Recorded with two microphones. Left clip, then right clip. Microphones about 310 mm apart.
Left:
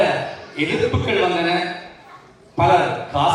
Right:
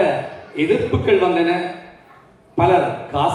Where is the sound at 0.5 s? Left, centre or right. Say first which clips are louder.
Right 2 dB; left.